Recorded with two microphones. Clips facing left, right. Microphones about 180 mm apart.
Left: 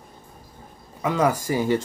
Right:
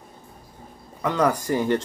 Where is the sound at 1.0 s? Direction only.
5° left (ahead or behind).